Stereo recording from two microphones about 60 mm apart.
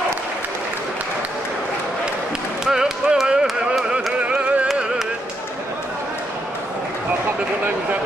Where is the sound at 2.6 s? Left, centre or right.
Centre.